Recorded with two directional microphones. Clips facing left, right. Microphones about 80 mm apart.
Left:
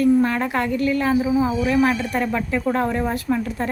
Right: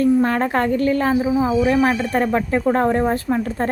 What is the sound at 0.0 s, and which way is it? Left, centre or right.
A woman's voice, right.